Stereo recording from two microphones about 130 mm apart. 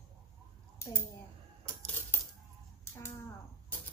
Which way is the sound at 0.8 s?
20° left (ahead or behind).